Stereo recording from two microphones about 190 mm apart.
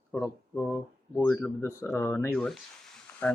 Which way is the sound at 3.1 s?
10° left (ahead or behind).